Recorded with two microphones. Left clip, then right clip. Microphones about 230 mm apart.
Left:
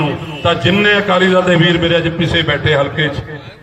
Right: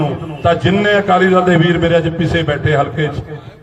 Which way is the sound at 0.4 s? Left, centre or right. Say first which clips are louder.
Left 1 dB; right.